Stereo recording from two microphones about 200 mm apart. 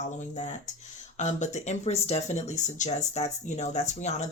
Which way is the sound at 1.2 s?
35° left (ahead or behind).